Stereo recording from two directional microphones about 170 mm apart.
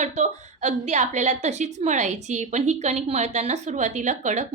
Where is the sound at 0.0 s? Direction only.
40° right (ahead or behind).